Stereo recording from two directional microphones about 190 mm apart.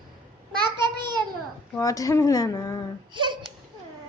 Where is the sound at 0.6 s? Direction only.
25° right (ahead or behind).